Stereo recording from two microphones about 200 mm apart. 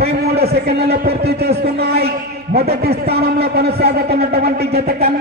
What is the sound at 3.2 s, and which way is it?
A man's voice, 50° right (ahead or behind).